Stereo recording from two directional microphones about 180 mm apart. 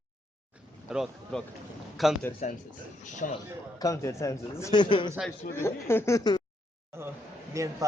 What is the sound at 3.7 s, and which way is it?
A man's voice, 20° left (ahead or behind).